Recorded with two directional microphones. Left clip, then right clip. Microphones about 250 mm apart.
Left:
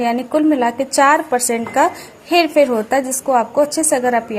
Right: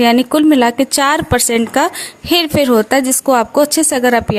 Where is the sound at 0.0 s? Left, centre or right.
Right.